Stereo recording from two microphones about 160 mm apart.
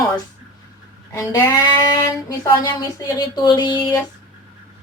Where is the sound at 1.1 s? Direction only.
20° left (ahead or behind).